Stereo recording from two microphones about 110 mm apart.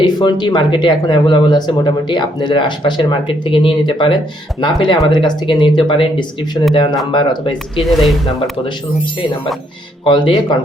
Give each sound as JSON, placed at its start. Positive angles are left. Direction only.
{"t": 0.0, "sound": "speech", "side_deg": 40}
{"t": 7.8, "sound": "speech", "side_deg": 0}
{"t": 10.0, "sound": "speech", "side_deg": 50}